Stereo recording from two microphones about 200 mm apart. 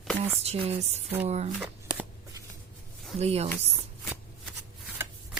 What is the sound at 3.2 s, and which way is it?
Speech, 30° right (ahead or behind).